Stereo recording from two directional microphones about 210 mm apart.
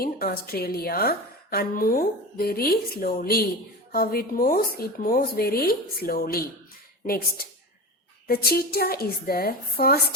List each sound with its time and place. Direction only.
0.0 s a woman's voice: 45° left (ahead or behind)